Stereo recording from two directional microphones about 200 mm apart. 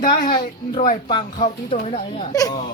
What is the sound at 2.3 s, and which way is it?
Speech, 20° left (ahead or behind).